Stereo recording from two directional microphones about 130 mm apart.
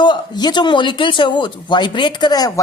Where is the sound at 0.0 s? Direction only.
35° left (ahead or behind).